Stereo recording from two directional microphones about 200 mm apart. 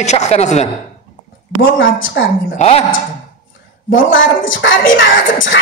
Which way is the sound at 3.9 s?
75° left (ahead or behind).